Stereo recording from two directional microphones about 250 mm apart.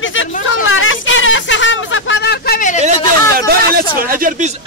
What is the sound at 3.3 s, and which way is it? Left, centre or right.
Speech, right.